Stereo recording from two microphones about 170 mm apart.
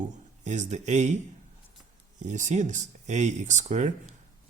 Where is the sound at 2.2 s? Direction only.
45° right (ahead or behind).